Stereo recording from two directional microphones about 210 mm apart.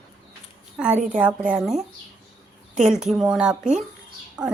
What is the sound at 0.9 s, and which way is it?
Speech, 35° right (ahead or behind).